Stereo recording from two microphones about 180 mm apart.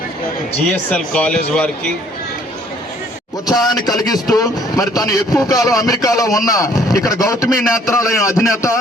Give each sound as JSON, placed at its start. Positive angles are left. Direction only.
{"t": 0.7, "sound": "speech", "side_deg": 5}
{"t": 3.4, "sound": "speech", "side_deg": 20}